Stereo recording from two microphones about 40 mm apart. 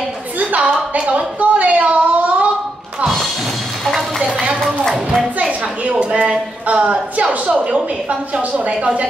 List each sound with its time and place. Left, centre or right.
0.6 s speech: right
5.4 s a woman's voice: right